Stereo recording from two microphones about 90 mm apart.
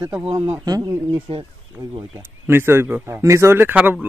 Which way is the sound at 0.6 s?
40° right (ahead or behind).